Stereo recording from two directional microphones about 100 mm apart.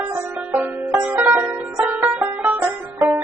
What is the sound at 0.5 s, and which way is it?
Banjo, 20° right (ahead or behind).